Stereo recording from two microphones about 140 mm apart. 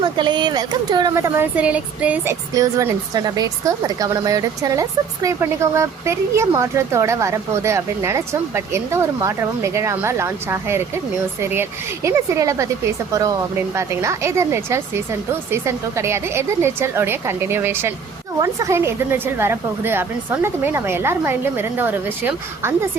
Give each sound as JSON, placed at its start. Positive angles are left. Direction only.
{"t": 0.0, "sound": "speech", "side_deg": -35}
{"t": 1.1, "sound": "speech", "side_deg": -15}
{"t": 2.6, "sound": "speech", "side_deg": -25}